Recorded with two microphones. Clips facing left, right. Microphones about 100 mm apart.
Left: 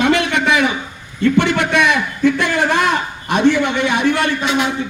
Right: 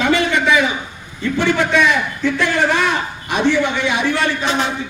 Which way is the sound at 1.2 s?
65° left (ahead or behind).